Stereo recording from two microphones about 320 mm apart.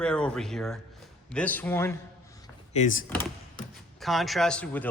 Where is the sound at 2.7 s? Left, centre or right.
Left.